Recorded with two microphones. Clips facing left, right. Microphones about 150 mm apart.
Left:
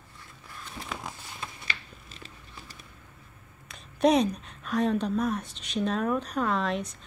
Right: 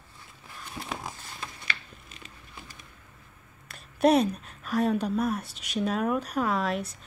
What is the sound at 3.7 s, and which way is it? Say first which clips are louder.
Speech: right 1 dB; 5° right (ahead or behind).